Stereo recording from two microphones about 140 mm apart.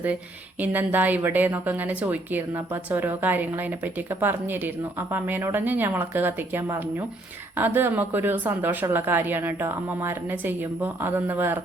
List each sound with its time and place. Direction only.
0.6 s a woman's voice: 10° right (ahead or behind)